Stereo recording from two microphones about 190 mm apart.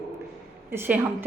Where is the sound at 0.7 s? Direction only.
10° right (ahead or behind).